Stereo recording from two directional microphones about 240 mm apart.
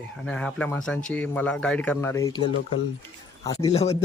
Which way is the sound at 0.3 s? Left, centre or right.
Centre.